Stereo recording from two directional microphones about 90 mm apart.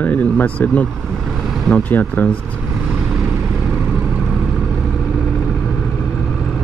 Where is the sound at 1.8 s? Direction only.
15° left (ahead or behind).